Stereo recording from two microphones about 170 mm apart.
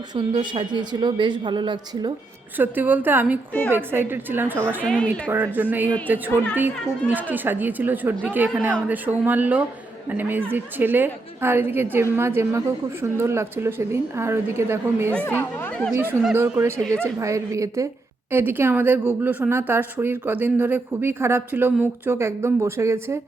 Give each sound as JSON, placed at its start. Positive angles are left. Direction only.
{"t": 0.1, "sound": "a woman's voice", "side_deg": -25}
{"t": 2.6, "sound": "a woman's voice", "side_deg": -10}
{"t": 4.9, "sound": "speech", "side_deg": 5}
{"t": 5.5, "sound": "a woman's voice", "side_deg": -10}
{"t": 15.1, "sound": "a woman's voice", "side_deg": 10}
{"t": 16.2, "sound": "a woman's voice", "side_deg": -15}